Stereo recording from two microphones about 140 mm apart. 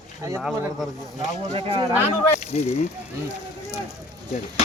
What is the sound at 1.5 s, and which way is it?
Speech, 40° right (ahead or behind).